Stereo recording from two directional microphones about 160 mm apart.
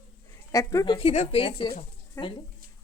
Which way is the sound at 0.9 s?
40° left (ahead or behind).